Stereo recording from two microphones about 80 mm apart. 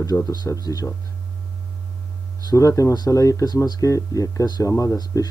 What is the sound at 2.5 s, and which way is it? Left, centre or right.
Speech, left.